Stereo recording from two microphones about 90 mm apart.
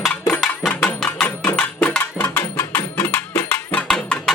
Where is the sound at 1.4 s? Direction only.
15° left (ahead or behind).